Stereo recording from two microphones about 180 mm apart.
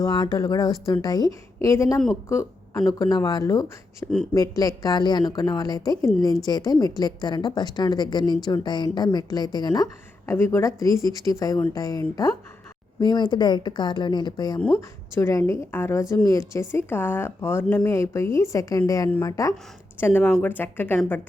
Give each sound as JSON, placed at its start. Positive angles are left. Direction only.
{"t": 0.0, "sound": "a woman's voice", "side_deg": 20}
{"t": 14.6, "sound": "a woman's voice", "side_deg": 10}